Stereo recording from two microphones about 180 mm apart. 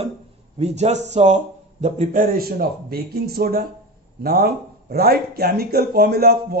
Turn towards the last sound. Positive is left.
turn(degrees=-60)  # may be behind; listen again after turning